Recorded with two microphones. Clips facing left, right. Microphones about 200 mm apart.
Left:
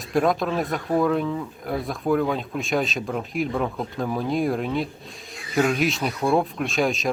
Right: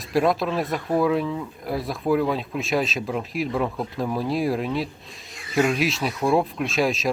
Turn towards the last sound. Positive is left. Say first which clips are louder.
# even
turn(degrees=0)  # may be behind; listen again after turning